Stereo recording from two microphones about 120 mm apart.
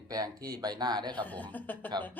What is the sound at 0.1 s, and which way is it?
Speech, 30° right (ahead or behind).